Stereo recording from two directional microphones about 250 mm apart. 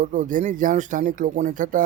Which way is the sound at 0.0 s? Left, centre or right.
Right.